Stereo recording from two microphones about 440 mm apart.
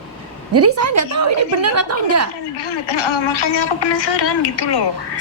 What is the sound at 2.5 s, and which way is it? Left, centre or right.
Speech, left.